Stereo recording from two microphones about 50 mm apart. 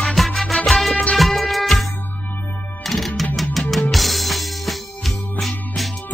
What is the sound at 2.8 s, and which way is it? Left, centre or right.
Music, centre.